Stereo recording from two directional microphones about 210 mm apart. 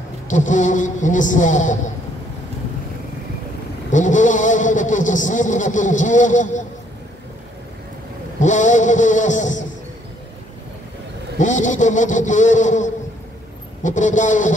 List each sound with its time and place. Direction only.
0.3 s a man's voice: 35° left (ahead or behind)
3.9 s a man's voice: 35° left (ahead or behind)
8.4 s a man's voice: 35° left (ahead or behind)
11.3 s a man's voice: 35° left (ahead or behind)